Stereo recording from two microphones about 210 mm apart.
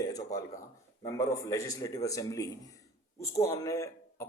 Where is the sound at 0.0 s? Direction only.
15° left (ahead or behind).